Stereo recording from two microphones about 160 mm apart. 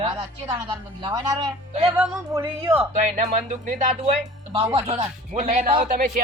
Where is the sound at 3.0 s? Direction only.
50° right (ahead or behind).